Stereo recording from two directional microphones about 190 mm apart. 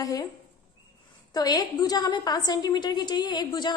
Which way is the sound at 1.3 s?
20° left (ahead or behind).